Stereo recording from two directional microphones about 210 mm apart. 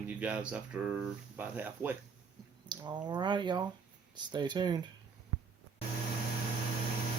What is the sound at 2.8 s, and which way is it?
Speech, 20° right (ahead or behind).